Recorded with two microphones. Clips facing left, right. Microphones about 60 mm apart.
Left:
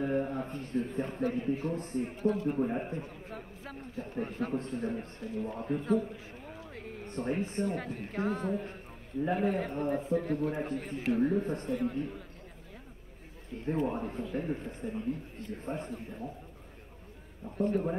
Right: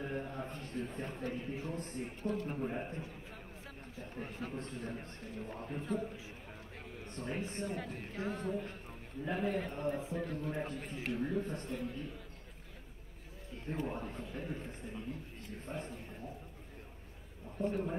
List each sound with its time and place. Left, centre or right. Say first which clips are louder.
0.0 s a man's voice: left 9 dB; left
14.0 s a man's voice: left 8 dB; left
17.6 s a man's voice: left 6 dB; left